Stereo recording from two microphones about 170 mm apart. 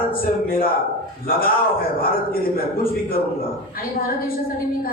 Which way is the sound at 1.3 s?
60° left (ahead or behind).